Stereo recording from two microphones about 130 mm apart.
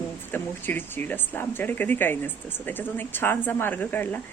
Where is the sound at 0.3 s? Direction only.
15° left (ahead or behind).